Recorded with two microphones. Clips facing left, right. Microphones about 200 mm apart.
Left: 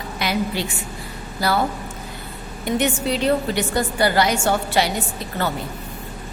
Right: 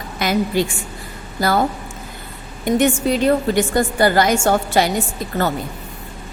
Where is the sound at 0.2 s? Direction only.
45° right (ahead or behind).